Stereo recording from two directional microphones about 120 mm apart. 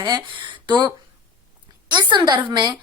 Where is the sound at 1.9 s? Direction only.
40° right (ahead or behind).